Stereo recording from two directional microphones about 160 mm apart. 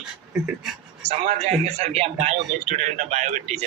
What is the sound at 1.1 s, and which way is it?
A man's voice, 40° right (ahead or behind).